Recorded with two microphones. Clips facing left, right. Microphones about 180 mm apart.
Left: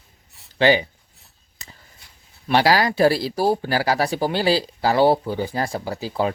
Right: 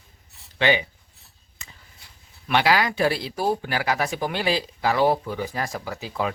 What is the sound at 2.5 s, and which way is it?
Speech, 35° left (ahead or behind).